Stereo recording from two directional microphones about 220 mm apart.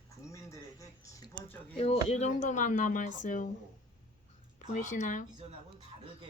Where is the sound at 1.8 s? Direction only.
30° left (ahead or behind).